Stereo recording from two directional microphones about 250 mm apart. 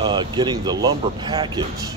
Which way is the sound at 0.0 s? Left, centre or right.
Centre.